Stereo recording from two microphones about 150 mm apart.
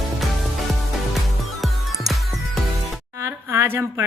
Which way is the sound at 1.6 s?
Centre (ahead or behind).